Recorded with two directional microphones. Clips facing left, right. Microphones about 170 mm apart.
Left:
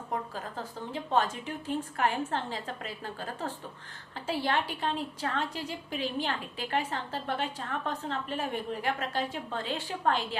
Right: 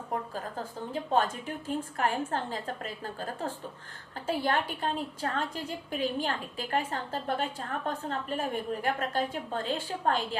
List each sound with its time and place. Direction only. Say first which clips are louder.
0.3 s a woman's voice: right 2 dB; 45° right (ahead or behind)